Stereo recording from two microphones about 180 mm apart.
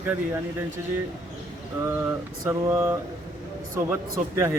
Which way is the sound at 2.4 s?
15° right (ahead or behind).